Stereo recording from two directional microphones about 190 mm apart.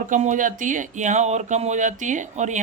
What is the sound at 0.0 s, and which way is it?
Speech, 40° right (ahead or behind).